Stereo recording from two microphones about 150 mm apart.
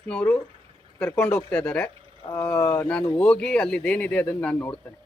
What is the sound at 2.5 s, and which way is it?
Speech, 20° left (ahead or behind).